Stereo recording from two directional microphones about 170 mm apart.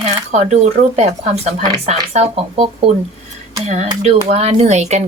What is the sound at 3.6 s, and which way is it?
Speech, 40° right (ahead or behind).